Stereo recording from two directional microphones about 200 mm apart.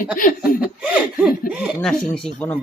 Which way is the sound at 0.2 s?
40° left (ahead or behind).